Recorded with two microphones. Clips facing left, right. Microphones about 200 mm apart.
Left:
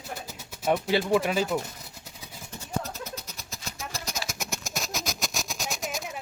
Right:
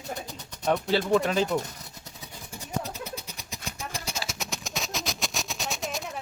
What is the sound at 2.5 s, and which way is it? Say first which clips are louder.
Music: even; 15° right (ahead or behind).